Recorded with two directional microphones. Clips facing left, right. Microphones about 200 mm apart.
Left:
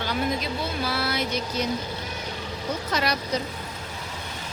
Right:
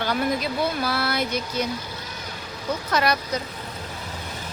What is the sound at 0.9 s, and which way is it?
Speech, 60° right (ahead or behind).